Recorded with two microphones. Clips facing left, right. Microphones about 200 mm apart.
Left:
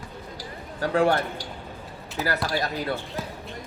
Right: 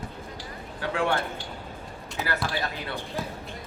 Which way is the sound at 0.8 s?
40° left (ahead or behind).